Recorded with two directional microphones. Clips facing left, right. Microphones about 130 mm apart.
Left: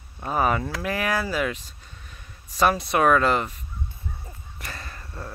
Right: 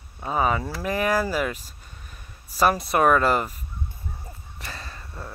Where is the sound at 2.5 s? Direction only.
5° right (ahead or behind).